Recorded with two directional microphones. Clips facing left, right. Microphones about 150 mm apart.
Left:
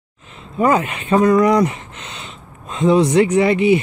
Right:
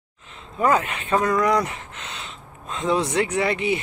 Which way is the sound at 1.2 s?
20° left (ahead or behind).